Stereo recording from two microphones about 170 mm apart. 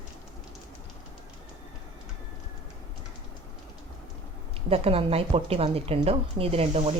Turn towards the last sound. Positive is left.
turn(degrees=-35)  # may be behind; listen again after turning